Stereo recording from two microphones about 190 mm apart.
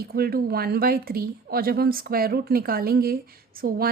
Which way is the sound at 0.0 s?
50° right (ahead or behind).